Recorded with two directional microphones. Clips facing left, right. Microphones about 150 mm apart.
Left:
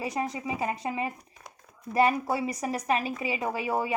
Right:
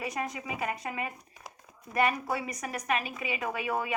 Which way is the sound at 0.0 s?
30° left (ahead or behind).